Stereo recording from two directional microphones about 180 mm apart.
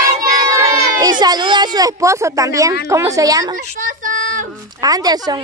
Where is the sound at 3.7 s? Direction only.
45° right (ahead or behind).